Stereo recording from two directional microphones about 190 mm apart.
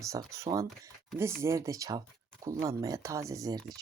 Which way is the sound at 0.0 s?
15° right (ahead or behind).